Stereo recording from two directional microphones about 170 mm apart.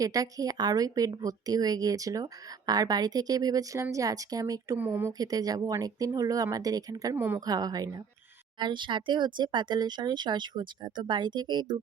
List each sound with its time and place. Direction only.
0.0 s a woman's voice: 20° right (ahead or behind)